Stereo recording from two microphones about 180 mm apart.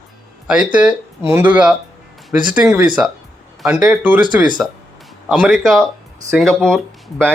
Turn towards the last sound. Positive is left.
turn(degrees=5)  # may be behind; listen again after turning